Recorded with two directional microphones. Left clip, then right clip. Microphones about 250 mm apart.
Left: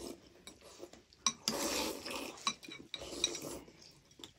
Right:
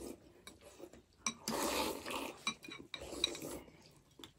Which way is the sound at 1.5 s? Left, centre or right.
Centre.